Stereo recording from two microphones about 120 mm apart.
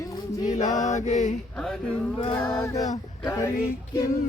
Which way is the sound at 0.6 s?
80° left.